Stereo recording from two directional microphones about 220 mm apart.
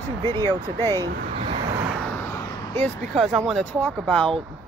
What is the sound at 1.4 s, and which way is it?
Vehicle, 25° right (ahead or behind).